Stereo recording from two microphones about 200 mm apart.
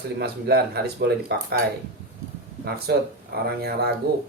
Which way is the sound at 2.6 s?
50° right (ahead or behind).